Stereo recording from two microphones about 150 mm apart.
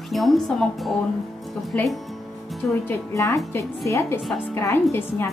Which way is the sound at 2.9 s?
20° left (ahead or behind).